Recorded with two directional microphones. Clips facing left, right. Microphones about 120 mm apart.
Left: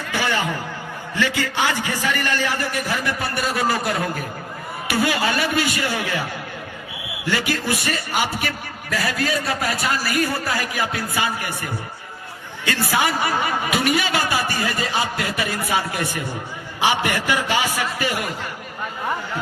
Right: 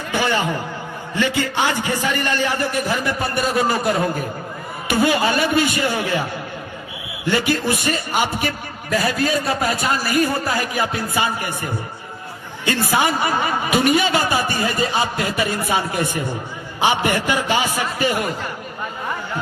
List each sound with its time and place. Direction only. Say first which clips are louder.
0.1 s a sound: right 3 dB; 25° right (ahead or behind)
1.1 s a man's voice: right 2 dB; 25° right (ahead or behind)
7.3 s a man's voice: right 4 dB; 25° right (ahead or behind)